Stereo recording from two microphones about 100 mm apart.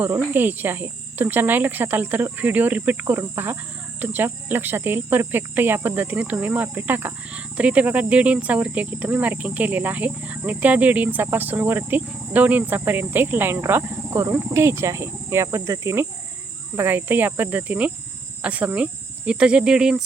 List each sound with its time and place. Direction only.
0.0 s cricket: 20° right (ahead or behind)
4.0 s speech: 20° right (ahead or behind)
14.3 s cricket: 25° right (ahead or behind)
16.7 s speech: 20° right (ahead or behind); by 20.1 s 5° right (ahead or behind)